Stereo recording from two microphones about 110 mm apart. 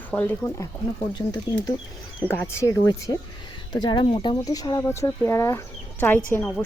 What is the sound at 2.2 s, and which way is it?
Speech, 20° left (ahead or behind).